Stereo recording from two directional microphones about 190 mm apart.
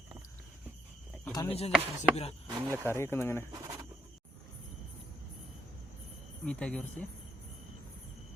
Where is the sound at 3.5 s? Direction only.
20° right (ahead or behind).